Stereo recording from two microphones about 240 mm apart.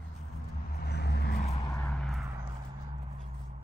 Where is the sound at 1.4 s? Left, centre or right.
Centre.